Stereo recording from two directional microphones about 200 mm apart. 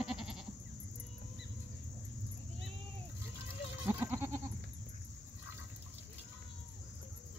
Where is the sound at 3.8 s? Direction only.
10° right (ahead or behind).